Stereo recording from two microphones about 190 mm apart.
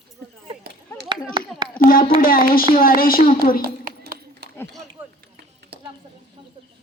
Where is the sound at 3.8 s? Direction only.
50° right (ahead or behind).